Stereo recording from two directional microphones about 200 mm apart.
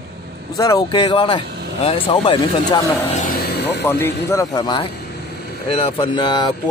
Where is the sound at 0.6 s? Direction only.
20° left (ahead or behind).